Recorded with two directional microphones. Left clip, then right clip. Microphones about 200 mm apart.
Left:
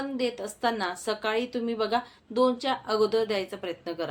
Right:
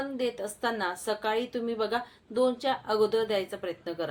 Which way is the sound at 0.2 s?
5° left (ahead or behind).